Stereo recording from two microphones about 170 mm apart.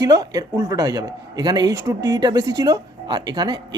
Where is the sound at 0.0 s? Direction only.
20° right (ahead or behind).